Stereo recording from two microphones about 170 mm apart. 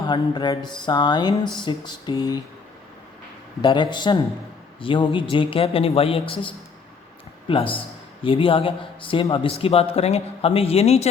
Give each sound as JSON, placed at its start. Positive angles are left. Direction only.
{"t": 0.0, "sound": "speech", "side_deg": 25}
{"t": 3.6, "sound": "a man's voice", "side_deg": 25}